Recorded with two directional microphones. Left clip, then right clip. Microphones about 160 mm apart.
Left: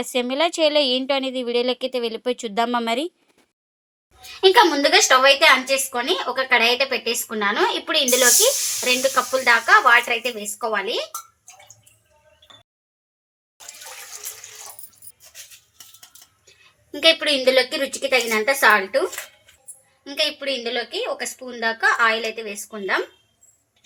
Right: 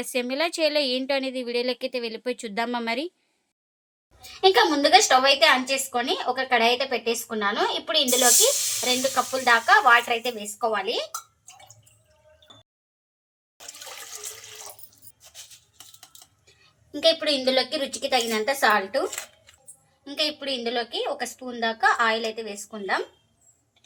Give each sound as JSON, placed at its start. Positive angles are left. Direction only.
{"t": 0.0, "sound": "a woman's voice", "side_deg": 10}
{"t": 4.4, "sound": "a woman's voice", "side_deg": 45}
{"t": 16.9, "sound": "a woman's voice", "side_deg": 35}
{"t": 20.7, "sound": "a woman's voice", "side_deg": 35}